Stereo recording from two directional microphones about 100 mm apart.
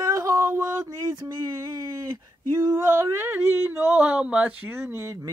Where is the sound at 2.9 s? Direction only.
25° right (ahead or behind).